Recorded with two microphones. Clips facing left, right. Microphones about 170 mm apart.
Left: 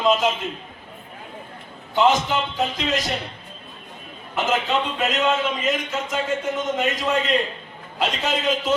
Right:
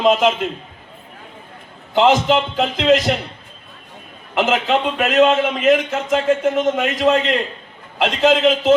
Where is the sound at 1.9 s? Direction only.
90° right.